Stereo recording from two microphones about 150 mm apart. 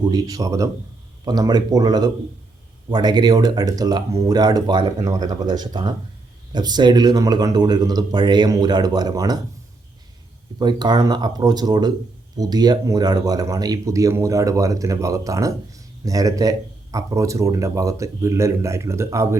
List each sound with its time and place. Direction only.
0.0 s speech: 25° right (ahead or behind)
10.6 s speech: 30° right (ahead or behind)